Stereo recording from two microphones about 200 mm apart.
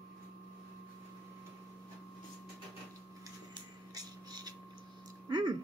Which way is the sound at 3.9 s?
20° right (ahead or behind).